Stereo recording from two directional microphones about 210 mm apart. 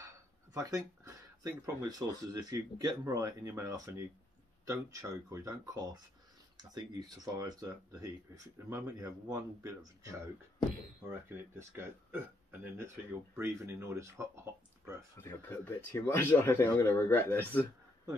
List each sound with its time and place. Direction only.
0.6 s speech: 15° right (ahead or behind)
15.1 s a man's voice: 10° left (ahead or behind)